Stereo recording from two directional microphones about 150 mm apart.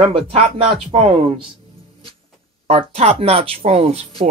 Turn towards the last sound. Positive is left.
turn(degrees=-40)  # may be behind; listen again after turning